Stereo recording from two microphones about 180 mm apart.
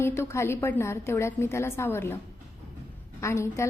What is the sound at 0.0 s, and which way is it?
A woman's voice, 15° left (ahead or behind).